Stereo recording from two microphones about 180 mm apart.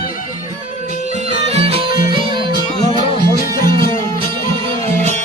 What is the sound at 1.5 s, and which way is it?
Music, 35° right (ahead or behind).